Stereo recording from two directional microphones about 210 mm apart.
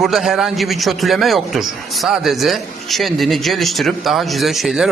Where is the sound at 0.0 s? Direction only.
Centre (ahead or behind).